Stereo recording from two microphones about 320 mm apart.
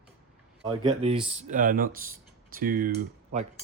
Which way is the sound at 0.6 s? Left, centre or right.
Centre.